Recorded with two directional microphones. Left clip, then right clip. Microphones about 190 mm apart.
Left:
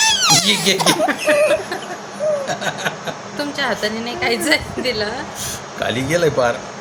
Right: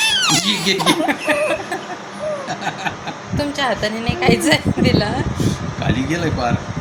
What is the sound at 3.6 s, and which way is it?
Speech, 5° right (ahead or behind).